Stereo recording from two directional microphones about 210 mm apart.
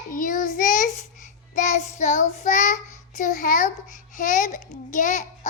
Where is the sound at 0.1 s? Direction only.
40° left (ahead or behind).